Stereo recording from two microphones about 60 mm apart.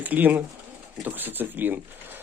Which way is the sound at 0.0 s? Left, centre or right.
Right.